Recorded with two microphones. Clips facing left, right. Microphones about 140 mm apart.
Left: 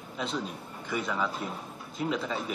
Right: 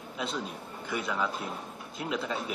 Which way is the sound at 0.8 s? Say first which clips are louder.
Left 1 dB; centre (ahead or behind).